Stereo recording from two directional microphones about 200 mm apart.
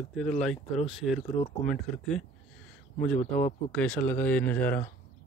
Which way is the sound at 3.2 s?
35° left (ahead or behind).